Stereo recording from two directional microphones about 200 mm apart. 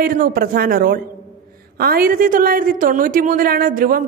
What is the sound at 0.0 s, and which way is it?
A woman's voice, 45° right (ahead or behind).